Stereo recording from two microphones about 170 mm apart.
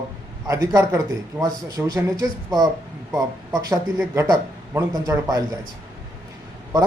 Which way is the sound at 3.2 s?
20° right (ahead or behind).